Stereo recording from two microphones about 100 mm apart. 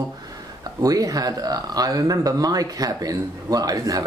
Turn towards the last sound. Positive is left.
turn(degrees=-35)  # may be behind; listen again after turning